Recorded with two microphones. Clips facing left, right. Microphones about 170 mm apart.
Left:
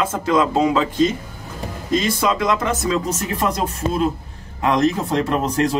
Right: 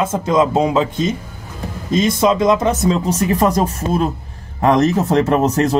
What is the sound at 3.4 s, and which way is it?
Speech, 45° right (ahead or behind).